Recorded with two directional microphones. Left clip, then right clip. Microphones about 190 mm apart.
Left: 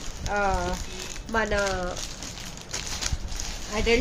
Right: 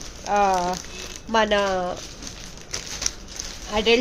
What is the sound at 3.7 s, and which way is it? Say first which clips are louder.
Speech: right 5 dB; 45° right (ahead or behind).